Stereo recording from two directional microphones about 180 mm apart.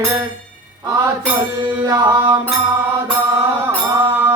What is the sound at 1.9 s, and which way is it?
Mantra, 20° right (ahead or behind).